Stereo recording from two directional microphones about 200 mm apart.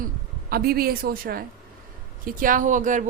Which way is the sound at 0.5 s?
50° right (ahead or behind).